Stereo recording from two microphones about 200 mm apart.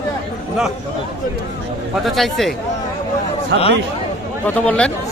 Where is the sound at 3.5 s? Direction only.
65° right (ahead or behind).